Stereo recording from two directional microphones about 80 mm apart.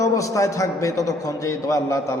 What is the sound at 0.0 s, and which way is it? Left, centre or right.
A man's voice, left.